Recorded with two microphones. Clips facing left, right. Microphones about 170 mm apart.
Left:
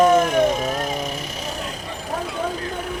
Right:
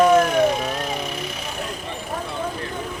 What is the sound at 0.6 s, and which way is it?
Vehicle, 45° left (ahead or behind).